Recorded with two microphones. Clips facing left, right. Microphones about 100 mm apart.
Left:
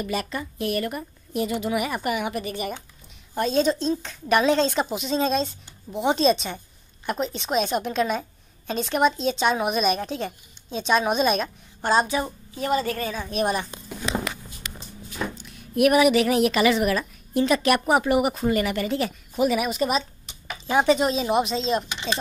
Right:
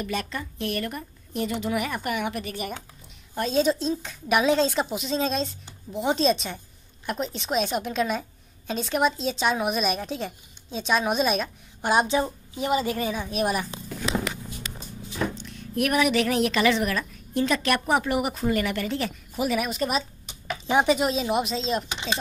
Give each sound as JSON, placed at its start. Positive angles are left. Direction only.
{"t": 0.0, "sound": "a woman's voice", "side_deg": 5}
{"t": 11.8, "sound": "a woman's voice", "side_deg": -15}
{"t": 15.3, "sound": "a woman's voice", "side_deg": 10}
{"t": 20.6, "sound": "speech", "side_deg": -20}
{"t": 20.9, "sound": "a woman's voice", "side_deg": 0}